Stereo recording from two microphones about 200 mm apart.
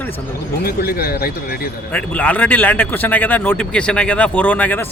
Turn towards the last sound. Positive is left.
turn(degrees=10)  # may be behind; listen again after turning